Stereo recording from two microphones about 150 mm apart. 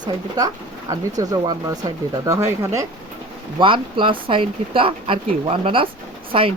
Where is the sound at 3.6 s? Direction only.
35° right (ahead or behind).